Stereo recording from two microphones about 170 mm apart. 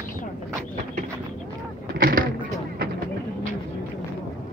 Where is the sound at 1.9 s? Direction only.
55° right (ahead or behind).